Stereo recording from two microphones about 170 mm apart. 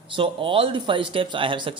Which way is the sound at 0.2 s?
30° right (ahead or behind).